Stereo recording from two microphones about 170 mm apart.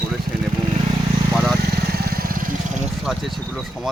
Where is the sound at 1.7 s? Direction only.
65° right (ahead or behind).